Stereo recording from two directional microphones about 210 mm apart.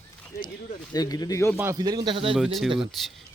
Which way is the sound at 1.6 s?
15° right (ahead or behind).